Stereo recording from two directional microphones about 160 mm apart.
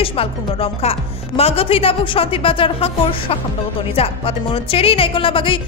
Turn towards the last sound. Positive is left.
turn(degrees=30)  # may be behind; listen again after turning